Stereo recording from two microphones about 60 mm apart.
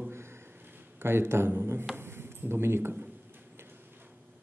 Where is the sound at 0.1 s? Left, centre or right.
Right.